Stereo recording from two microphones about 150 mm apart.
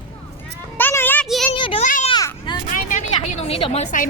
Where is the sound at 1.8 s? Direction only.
55° left (ahead or behind).